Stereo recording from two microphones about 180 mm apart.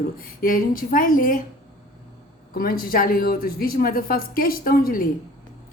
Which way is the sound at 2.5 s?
50° left (ahead or behind).